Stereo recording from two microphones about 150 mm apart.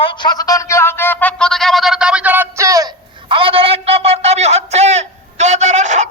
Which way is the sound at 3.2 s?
35° right (ahead or behind).